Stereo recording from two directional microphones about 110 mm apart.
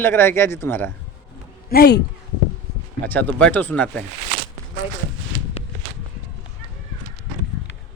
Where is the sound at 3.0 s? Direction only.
15° left (ahead or behind).